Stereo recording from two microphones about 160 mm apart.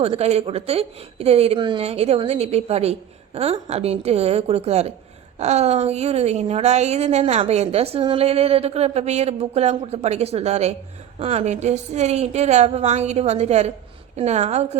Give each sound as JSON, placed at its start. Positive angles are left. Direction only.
{"t": 0.0, "sound": "a woman's voice", "side_deg": -40}